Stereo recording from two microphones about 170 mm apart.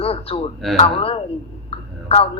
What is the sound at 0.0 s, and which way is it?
Speech, 35° left (ahead or behind).